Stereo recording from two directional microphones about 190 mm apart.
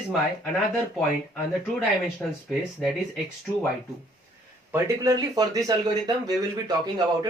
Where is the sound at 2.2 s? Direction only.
10° left (ahead or behind).